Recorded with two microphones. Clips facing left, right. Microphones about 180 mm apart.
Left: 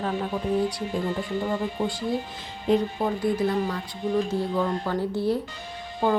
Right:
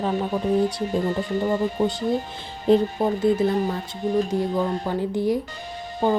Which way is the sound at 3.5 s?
40° right (ahead or behind).